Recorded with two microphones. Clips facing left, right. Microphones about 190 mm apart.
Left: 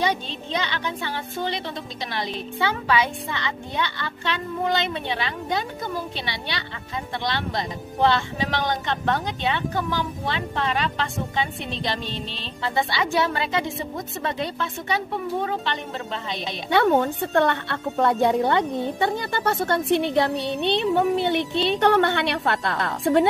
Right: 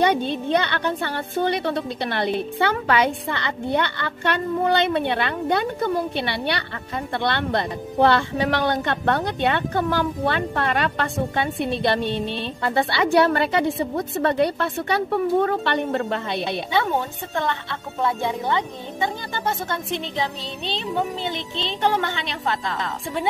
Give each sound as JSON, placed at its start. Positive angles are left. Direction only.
{"t": 0.0, "sound": "speech", "side_deg": -60}
{"t": 17.3, "sound": "a woman's voice", "side_deg": 65}